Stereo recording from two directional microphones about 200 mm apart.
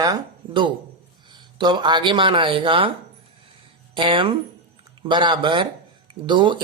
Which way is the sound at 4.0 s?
25° right (ahead or behind).